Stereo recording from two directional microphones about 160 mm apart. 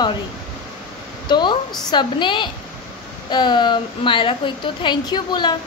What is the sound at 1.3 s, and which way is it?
A woman's voice, 30° left (ahead or behind).